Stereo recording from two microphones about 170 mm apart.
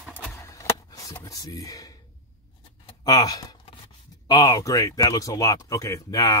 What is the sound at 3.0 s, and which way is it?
Speech, 20° left (ahead or behind).